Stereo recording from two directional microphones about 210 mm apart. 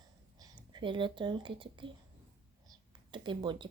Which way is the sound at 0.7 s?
25° right (ahead or behind).